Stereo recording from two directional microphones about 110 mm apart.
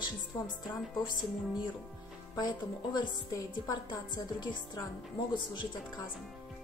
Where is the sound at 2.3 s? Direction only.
40° left (ahead or behind).